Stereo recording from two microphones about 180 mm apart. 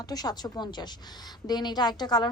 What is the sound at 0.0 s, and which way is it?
A woman's voice, 20° left (ahead or behind).